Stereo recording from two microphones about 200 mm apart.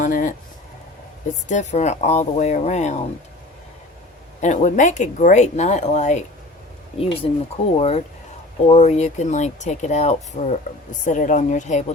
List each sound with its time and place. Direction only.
0.0 s a sound: 40° left (ahead or behind)
1.5 s speech: 35° left (ahead or behind)
4.4 s speech: 40° left (ahead or behind)